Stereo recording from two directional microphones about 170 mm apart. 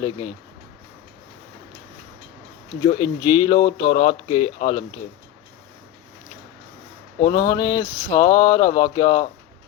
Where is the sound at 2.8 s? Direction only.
25° left (ahead or behind).